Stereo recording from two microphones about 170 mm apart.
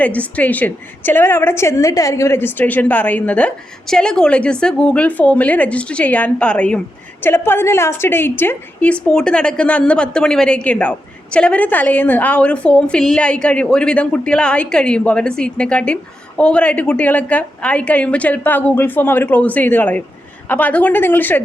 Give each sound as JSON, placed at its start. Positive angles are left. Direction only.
{"t": 0.0, "sound": "a woman's voice", "side_deg": 10}